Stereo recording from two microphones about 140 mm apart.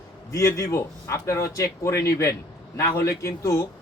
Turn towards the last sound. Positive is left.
turn(degrees=20)  # may be behind; listen again after turning